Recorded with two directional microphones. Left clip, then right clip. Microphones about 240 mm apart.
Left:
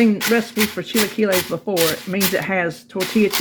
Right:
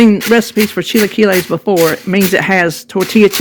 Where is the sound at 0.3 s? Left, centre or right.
Right.